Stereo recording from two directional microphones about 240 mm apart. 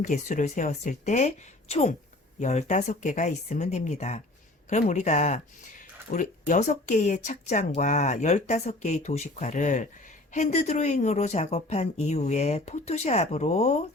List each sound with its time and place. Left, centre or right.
0.0 s speech: left